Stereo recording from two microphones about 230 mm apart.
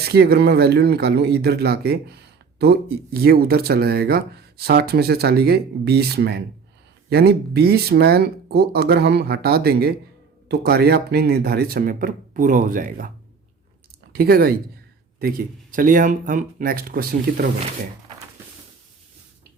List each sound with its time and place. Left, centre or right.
0.0 s speech: right
14.1 s speech: right